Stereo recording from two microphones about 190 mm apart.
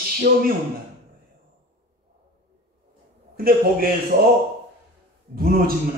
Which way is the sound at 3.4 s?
50° right (ahead or behind).